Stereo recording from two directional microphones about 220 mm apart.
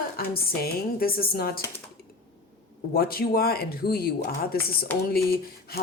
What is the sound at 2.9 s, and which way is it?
Speech, 45° left (ahead or behind).